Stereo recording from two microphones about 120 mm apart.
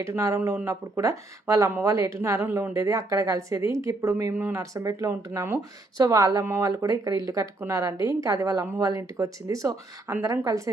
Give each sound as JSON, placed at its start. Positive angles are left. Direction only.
{"t": 0.0, "sound": "speech", "side_deg": -25}